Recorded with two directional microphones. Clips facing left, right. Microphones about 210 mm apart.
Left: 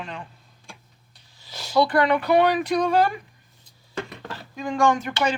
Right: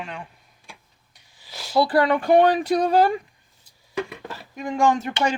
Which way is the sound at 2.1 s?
45° right (ahead or behind).